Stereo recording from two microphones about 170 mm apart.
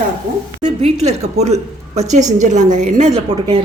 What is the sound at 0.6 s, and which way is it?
A woman's voice, 40° right (ahead or behind).